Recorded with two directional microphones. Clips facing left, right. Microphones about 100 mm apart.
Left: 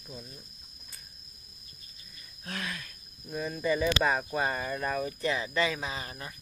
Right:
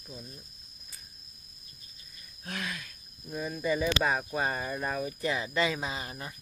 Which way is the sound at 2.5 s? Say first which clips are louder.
Even; 5° right (ahead or behind).